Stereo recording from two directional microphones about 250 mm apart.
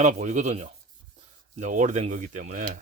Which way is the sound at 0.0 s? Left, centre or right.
Right.